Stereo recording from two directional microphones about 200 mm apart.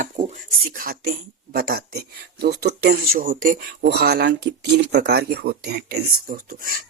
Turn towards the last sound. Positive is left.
turn(degrees=-45)  # may be behind; listen again after turning